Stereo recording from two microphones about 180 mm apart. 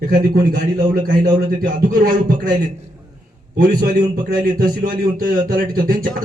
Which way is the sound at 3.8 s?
50° right (ahead or behind).